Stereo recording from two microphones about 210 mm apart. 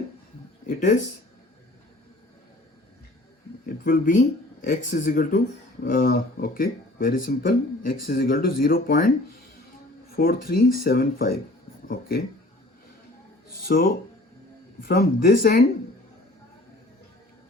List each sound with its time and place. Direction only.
0.7 s speech: 35° left (ahead or behind)
3.8 s speech: 40° left (ahead or behind)
10.2 s speech: 45° left (ahead or behind)
13.5 s speech: 45° left (ahead or behind)